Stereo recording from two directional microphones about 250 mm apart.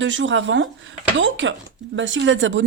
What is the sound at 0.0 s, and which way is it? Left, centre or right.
Speech, right.